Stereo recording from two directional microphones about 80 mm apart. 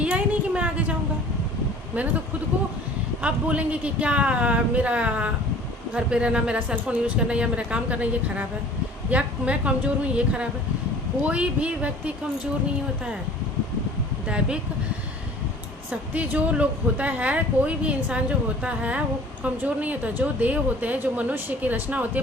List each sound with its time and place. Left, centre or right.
0.0 s a sound: centre
3.2 s speech: centre
14.3 s speech: centre
15.9 s a woman's voice: centre